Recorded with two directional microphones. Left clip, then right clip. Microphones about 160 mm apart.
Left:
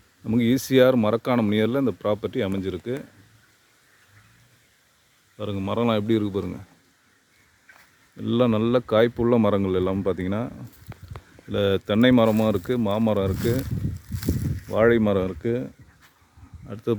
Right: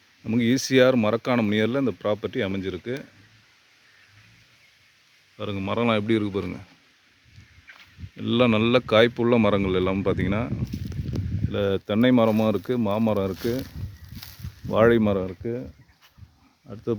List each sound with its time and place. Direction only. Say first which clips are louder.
0.2 s speech: left 1 dB; centre (ahead or behind)
5.4 s speech: even; 5° left (ahead or behind)
8.1 s speech: right 1 dB; 5° right (ahead or behind)
11.5 s speech: left 2 dB; 5° left (ahead or behind)
14.7 s speech: even; 15° right (ahead or behind)
15.4 s speech: left 5 dB; 30° left (ahead or behind)
16.6 s speech: left 2 dB; 10° left (ahead or behind)